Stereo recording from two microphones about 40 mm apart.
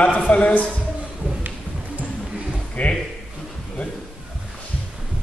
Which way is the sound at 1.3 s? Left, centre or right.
Right.